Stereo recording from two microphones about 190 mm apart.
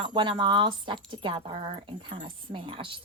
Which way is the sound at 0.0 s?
25° right (ahead or behind).